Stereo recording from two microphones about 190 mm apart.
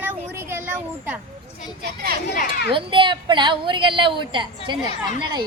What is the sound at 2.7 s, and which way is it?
A woman's voice, 25° right (ahead or behind).